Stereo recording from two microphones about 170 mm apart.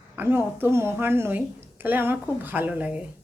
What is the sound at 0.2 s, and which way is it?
A woman's voice, 10° right (ahead or behind).